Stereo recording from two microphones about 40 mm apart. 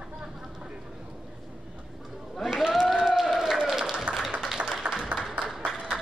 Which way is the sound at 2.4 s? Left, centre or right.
Centre.